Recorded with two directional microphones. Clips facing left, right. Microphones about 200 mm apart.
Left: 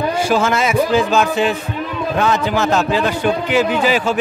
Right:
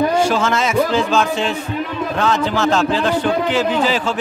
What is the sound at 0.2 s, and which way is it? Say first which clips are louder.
A man's voice: left 1 dB; 10° left (ahead or behind).